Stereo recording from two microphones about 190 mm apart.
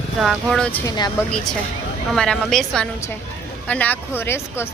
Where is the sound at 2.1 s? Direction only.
5° left (ahead or behind).